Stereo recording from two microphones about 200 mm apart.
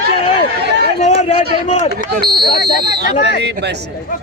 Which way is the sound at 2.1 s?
50° right (ahead or behind).